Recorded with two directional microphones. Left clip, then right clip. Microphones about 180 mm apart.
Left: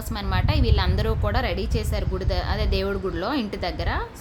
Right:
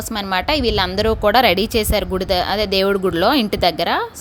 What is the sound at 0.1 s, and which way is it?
A woman's voice, 35° right (ahead or behind).